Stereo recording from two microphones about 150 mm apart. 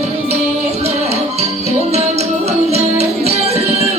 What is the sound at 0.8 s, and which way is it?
Music, 45° right (ahead or behind).